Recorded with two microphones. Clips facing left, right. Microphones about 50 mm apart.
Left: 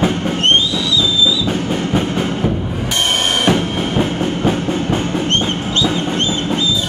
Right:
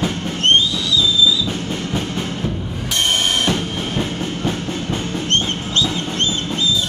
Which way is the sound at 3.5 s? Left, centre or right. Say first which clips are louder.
Left 5 dB; left.